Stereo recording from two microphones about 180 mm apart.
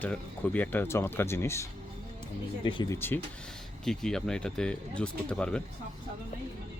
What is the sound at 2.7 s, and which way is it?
Speech, 25° left (ahead or behind).